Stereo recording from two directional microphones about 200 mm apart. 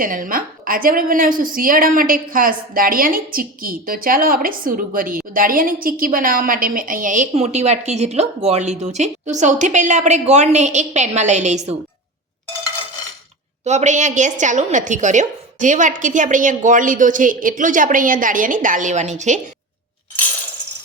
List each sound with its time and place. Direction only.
0.0 s a woman's voice: 45° right (ahead or behind)
13.7 s a woman's voice: 35° right (ahead or behind)